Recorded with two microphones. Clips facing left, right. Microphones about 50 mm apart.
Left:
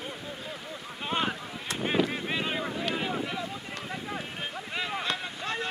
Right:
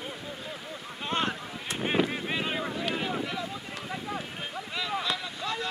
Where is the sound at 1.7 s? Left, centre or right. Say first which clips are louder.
Even; centre.